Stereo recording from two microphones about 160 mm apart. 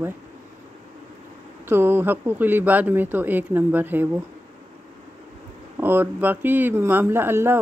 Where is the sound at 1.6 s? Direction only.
15° right (ahead or behind).